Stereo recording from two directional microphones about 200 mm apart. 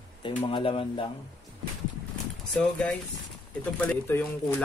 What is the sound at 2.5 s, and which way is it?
Speech, centre (ahead or behind).